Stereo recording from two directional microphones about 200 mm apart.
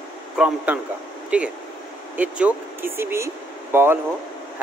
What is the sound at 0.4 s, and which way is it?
Speech, 5° right (ahead or behind).